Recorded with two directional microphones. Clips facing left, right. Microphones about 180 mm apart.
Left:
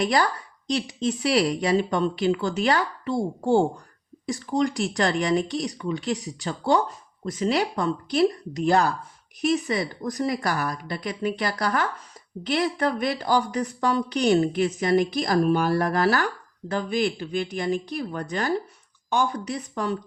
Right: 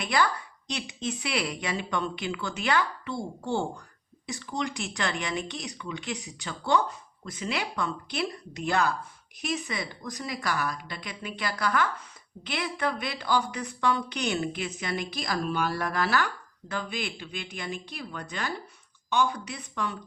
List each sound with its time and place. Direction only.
0.0 s speech: 40° left (ahead or behind)